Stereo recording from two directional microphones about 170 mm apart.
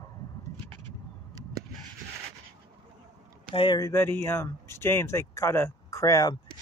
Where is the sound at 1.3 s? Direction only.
20° right (ahead or behind).